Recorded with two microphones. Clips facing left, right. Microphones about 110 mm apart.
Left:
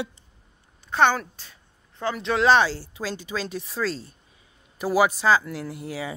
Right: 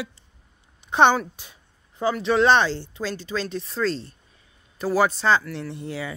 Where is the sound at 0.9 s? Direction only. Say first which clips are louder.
Right 3 dB; 20° right (ahead or behind); by 6.1 s 10° left (ahead or behind).